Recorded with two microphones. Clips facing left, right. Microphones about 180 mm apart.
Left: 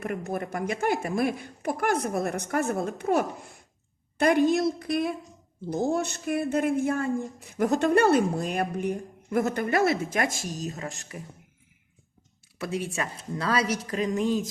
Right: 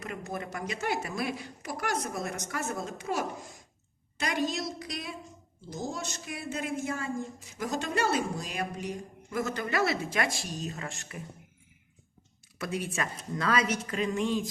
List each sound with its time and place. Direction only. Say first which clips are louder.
0.0 s speech: left 6 dB; 55° left (ahead or behind); by 11.2 s 35° left (ahead or behind)
12.5 s a woman's voice: left 3 dB; 30° left (ahead or behind)